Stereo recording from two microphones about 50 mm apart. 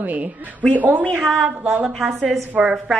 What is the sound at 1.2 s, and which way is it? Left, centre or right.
A woman's voice, centre.